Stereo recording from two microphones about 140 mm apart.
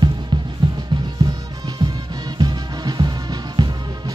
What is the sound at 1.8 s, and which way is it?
Music, 25° right (ahead or behind).